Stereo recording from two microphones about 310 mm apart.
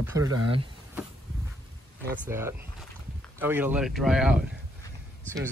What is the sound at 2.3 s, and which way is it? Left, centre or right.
Speech, centre.